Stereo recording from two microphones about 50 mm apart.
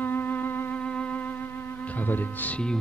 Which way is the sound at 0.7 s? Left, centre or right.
Left.